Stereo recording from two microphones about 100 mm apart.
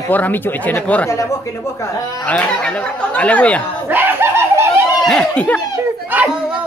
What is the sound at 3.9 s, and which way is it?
Speech, 20° right (ahead or behind).